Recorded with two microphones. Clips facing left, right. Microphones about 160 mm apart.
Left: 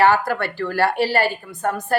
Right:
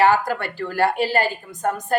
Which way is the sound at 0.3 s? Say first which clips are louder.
Left 2 dB; 15° right (ahead or behind).